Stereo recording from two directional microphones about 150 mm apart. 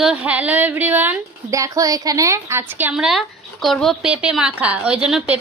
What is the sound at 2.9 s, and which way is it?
A woman's voice, 5° right (ahead or behind).